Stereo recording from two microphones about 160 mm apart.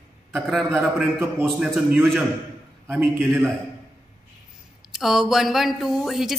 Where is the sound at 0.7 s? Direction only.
10° right (ahead or behind).